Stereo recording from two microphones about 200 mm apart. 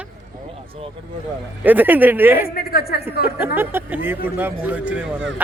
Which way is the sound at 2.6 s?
50° left (ahead or behind).